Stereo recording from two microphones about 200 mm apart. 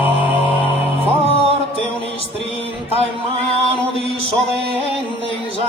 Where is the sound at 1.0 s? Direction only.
30° right (ahead or behind).